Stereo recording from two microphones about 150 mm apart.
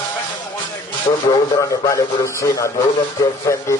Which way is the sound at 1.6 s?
20° left (ahead or behind).